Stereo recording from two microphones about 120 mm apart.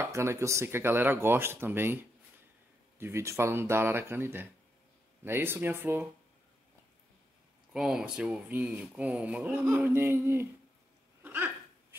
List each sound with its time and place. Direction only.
0.0 s speech: 20° right (ahead or behind)
3.0 s speech: 20° right (ahead or behind)
7.7 s speech: 5° right (ahead or behind)
11.2 s dog: 20° right (ahead or behind)